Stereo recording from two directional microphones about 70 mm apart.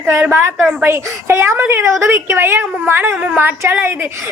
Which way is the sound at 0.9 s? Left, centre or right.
Right.